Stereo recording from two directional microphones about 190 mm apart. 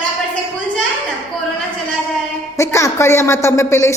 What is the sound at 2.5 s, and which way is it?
Speech, 15° left (ahead or behind).